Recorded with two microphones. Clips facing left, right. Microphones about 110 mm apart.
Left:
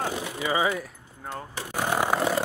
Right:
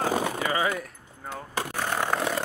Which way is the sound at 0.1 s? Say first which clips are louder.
Right 5 dB; 45° right (ahead or behind).